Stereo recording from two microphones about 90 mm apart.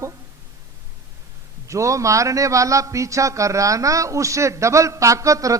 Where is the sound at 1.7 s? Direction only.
35° right (ahead or behind).